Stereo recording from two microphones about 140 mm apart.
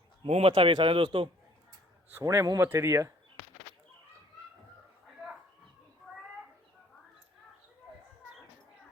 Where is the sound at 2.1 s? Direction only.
20° right (ahead or behind).